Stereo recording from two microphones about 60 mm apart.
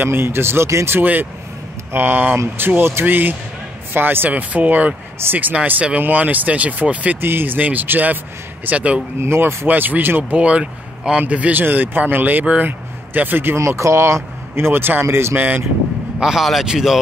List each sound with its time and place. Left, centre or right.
0.0 s speech: right
1.9 s speech: right
7.2 s speech: right
9.2 s speech: right
9.7 s speech: right
10.3 s speech: centre
13.6 s speech: right
15.3 s speech: right
16.2 s speech: centre